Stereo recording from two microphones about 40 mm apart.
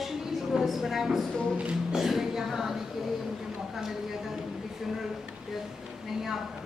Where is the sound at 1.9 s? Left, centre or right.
Centre.